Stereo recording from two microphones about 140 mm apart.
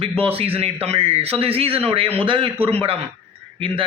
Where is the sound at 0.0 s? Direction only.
45° right (ahead or behind).